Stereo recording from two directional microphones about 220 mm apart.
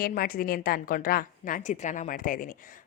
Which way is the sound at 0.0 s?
40° left (ahead or behind).